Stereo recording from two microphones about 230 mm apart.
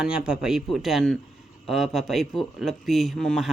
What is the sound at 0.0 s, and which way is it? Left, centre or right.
Speech, centre.